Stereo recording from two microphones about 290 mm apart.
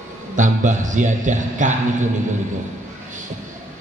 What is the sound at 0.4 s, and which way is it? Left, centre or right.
A man's voice, right.